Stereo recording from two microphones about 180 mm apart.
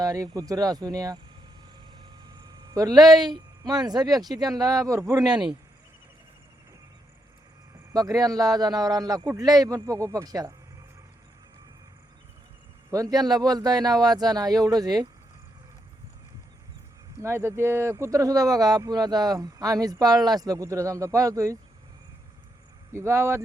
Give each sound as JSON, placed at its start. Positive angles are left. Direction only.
{"t": 0.0, "sound": "speech", "side_deg": -20}
{"t": 2.3, "sound": "a sound", "side_deg": -20}
{"t": 3.3, "sound": "speech", "side_deg": -25}
{"t": 7.9, "sound": "speech", "side_deg": -20}
{"t": 12.9, "sound": "speech", "side_deg": -20}
{"t": 17.2, "sound": "speech", "side_deg": -15}
{"t": 22.9, "sound": "speech", "side_deg": -15}